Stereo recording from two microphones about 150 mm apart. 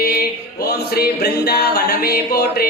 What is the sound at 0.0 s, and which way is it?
Music, 90° left.